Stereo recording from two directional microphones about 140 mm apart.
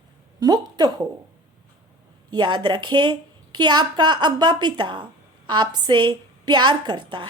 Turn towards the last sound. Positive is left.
turn(degrees=-35)  # may be behind; listen again after turning